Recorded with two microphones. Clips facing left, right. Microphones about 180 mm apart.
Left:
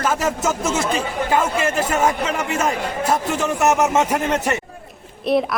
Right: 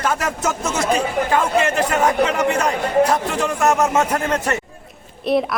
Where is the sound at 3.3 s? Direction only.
5° left (ahead or behind).